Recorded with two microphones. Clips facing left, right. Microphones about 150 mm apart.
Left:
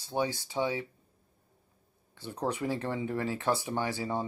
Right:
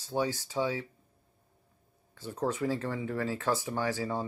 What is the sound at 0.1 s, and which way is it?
Speech, 20° left (ahead or behind).